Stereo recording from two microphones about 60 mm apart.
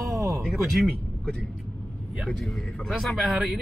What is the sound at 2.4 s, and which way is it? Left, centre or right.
Speech, centre.